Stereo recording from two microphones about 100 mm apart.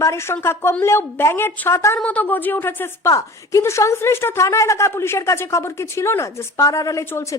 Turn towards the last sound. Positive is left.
turn(degrees=30)  # may be behind; listen again after turning